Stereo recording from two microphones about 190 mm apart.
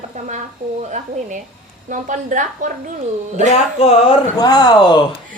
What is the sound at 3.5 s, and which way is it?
Speech, 35° left (ahead or behind).